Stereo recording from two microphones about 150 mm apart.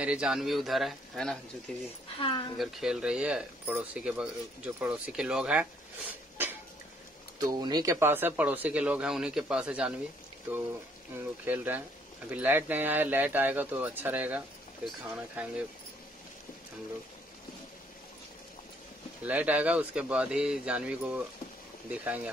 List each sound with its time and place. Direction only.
0.0 s speech: 5° right (ahead or behind)
2.1 s speech: 35° left (ahead or behind)
2.6 s speech: 5° right (ahead or behind)
7.3 s speech: 25° right (ahead or behind); by 9.9 s 5° right (ahead or behind)
11.1 s speech: 10° right (ahead or behind)
19.2 s speech: 10° right (ahead or behind)